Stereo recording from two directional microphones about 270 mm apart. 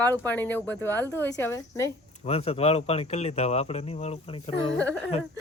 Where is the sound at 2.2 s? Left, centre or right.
Left.